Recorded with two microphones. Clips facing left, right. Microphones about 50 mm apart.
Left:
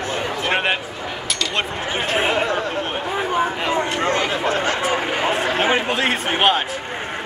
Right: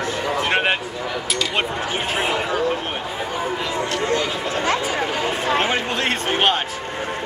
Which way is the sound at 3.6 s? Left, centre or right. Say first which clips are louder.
Left 3 dB; left.